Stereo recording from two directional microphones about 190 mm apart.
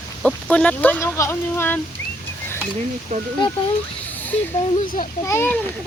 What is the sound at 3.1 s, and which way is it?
Speech, 45° right (ahead or behind).